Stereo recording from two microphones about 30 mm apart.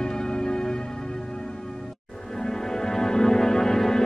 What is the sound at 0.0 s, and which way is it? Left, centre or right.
Music, left.